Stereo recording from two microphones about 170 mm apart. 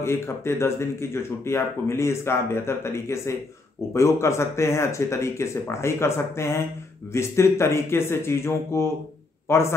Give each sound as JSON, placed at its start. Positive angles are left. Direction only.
{"t": 0.0, "sound": "speech", "side_deg": 15}